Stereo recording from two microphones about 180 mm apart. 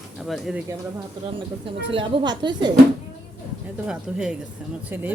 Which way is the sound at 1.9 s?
30° right (ahead or behind).